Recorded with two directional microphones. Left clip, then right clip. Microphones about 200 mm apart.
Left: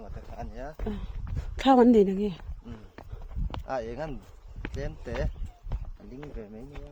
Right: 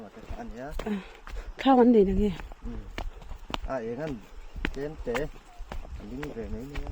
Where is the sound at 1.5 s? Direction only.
30° left (ahead or behind).